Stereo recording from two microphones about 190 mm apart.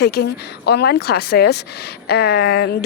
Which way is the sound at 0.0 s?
60° left (ahead or behind).